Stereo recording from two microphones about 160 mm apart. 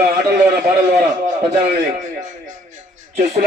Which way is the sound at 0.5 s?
60° right (ahead or behind).